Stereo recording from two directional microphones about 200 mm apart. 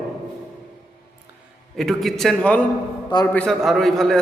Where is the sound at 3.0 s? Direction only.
20° left (ahead or behind).